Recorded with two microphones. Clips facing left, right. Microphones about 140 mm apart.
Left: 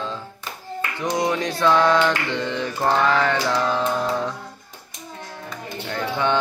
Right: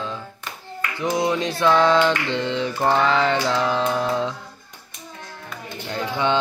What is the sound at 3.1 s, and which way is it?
Mantra, 20° right (ahead or behind).